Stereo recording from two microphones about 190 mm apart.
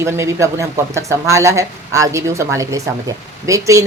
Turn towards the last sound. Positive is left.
turn(degrees=-15)  # may be behind; listen again after turning